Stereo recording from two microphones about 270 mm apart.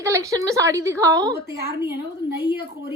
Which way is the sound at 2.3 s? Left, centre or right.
Right.